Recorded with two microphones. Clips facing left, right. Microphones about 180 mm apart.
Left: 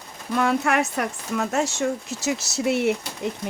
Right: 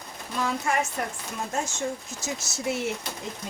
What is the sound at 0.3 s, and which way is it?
Speech, 65° left (ahead or behind).